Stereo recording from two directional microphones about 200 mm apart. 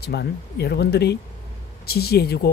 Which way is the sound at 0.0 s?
55° left (ahead or behind).